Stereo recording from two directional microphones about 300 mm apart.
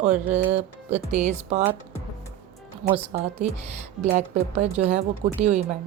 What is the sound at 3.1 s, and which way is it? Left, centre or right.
A woman's voice, right.